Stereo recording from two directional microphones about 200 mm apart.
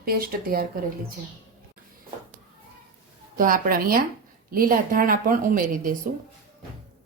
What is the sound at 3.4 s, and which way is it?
A woman's voice, 45° right (ahead or behind).